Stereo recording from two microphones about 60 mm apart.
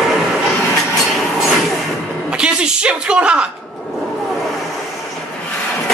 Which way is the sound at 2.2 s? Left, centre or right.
Centre.